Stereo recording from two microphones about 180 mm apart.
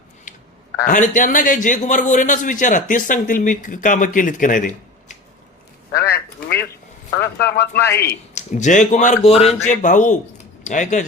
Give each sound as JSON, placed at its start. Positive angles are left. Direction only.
{"t": 0.8, "sound": "a man's voice", "side_deg": 50}
{"t": 5.9, "sound": "quack", "side_deg": 60}
{"t": 7.2, "sound": "speech", "side_deg": 60}
{"t": 8.4, "sound": "a man's voice", "side_deg": 45}